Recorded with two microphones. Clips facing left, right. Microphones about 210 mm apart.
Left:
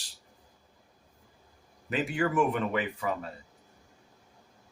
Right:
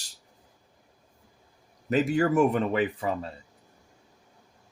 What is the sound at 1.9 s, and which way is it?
Speech, 40° right (ahead or behind).